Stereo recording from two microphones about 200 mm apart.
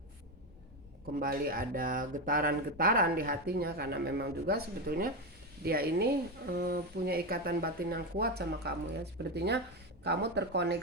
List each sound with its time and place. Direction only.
1.2 s speech: 45° right (ahead or behind)